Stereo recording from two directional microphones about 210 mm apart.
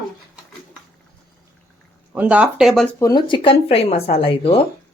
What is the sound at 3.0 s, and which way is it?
Speech, 20° left (ahead or behind).